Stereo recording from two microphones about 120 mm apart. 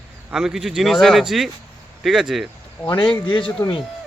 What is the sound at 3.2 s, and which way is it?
Speech, 45° left (ahead or behind).